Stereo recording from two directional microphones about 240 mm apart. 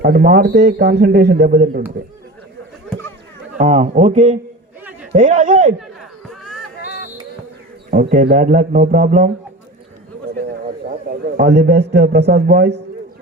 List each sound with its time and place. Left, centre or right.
0.0 s speech: right
3.6 s speech: right
6.2 s a sound: centre
7.9 s speech: right
10.8 s a man's voice: right